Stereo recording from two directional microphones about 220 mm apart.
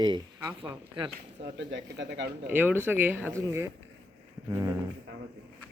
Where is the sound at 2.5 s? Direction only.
10° right (ahead or behind).